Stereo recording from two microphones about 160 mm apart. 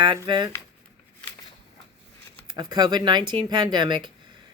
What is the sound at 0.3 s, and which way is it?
Speech, 30° right (ahead or behind).